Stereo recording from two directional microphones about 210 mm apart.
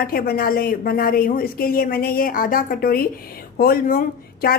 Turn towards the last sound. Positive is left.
turn(degrees=40)  # may be behind; listen again after turning